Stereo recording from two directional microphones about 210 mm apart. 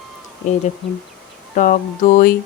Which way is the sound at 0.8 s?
25° left (ahead or behind).